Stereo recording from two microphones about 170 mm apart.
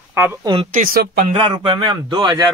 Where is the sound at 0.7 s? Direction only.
50° right (ahead or behind).